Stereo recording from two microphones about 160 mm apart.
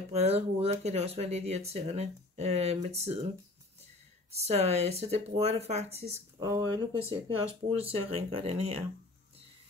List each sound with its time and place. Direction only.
0.1 s speech: 40° right (ahead or behind)
4.3 s speech: 40° right (ahead or behind)
6.4 s speech: 20° right (ahead or behind)
7.2 s speech: 35° right (ahead or behind)